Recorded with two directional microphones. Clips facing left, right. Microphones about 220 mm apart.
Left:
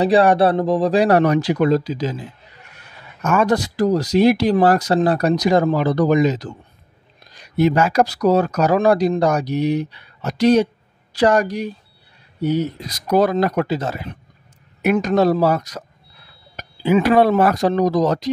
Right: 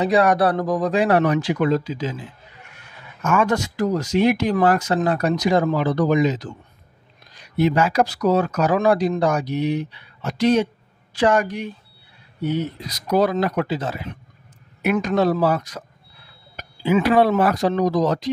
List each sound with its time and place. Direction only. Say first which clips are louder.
0.0 s speech: left 3 dB; 30° left (ahead or behind)